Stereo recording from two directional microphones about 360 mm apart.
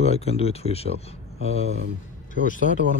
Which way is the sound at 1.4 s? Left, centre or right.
Right.